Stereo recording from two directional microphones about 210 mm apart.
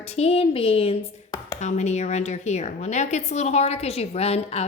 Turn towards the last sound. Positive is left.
turn(degrees=30)  # may be behind; listen again after turning